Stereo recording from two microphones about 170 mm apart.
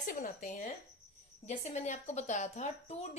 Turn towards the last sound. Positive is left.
turn(degrees=40)  # may be behind; listen again after turning